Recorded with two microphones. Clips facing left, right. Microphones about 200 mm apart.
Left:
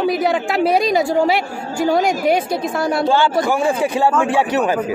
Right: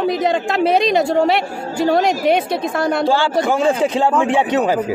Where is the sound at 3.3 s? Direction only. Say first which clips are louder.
Right 1 dB; 25° right (ahead or behind).